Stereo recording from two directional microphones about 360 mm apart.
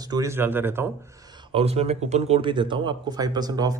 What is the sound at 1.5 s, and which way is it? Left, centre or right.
Speech, centre.